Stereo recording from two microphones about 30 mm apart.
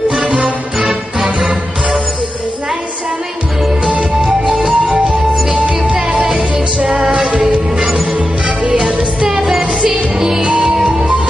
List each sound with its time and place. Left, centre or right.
0.4 s music: centre
4.5 s music: centre
6.1 s music: centre
6.9 s music: centre
7.8 s music: centre